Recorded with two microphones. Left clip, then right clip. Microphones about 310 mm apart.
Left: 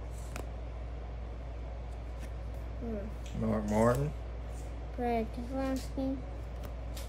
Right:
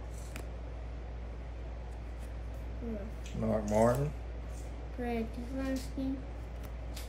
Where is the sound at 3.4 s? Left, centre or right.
Centre.